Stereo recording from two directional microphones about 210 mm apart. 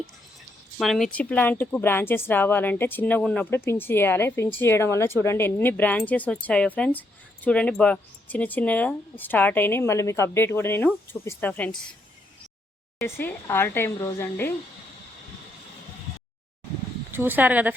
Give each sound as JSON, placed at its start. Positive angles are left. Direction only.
{"t": 0.8, "sound": "speech", "side_deg": 0}
{"t": 13.0, "sound": "speech", "side_deg": 10}
{"t": 17.1, "sound": "speech", "side_deg": -10}